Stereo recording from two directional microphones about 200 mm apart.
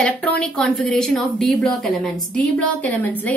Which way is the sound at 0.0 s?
5° left (ahead or behind).